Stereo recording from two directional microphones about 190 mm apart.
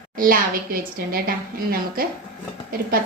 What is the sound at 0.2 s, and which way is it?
A woman's voice, 45° right (ahead or behind).